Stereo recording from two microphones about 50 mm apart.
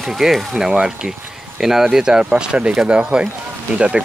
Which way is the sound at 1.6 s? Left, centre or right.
Centre.